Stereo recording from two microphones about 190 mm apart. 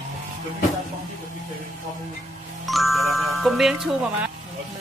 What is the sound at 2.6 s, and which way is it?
Music, centre (ahead or behind).